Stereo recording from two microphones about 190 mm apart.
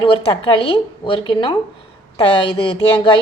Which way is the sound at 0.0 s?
25° left (ahead or behind).